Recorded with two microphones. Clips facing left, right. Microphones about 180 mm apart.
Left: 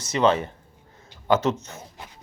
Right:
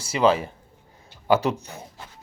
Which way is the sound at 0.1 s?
5° right (ahead or behind).